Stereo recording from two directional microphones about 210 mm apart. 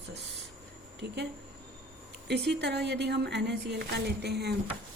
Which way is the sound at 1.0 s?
55° right (ahead or behind).